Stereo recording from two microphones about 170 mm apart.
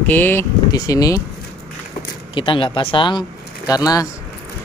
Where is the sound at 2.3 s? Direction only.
30° left (ahead or behind).